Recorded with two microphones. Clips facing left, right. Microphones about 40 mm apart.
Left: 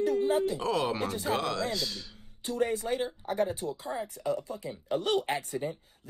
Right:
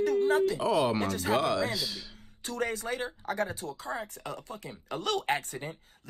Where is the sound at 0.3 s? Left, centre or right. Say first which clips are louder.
Right 2 dB; right.